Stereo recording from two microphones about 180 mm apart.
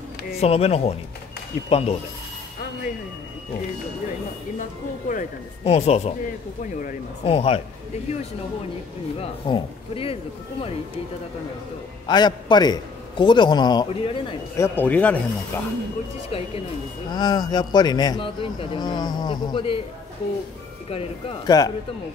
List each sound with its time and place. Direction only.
0.4 s speech: 35° left (ahead or behind)
4.6 s speech: 45° left (ahead or behind)
5.7 s speech: 35° left (ahead or behind)
6.6 s speech: 45° left (ahead or behind)
7.2 s speech: 30° left (ahead or behind)
9.2 s speech: 30° left (ahead or behind)
12.1 s a man's voice: 25° left (ahead or behind)
14.6 s speech: 10° left (ahead or behind)
17.1 s a man's voice: 20° left (ahead or behind)
20.9 s a man's voice: 25° left (ahead or behind)